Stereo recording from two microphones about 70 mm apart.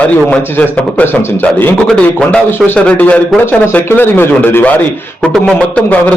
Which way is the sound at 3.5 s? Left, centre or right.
Left.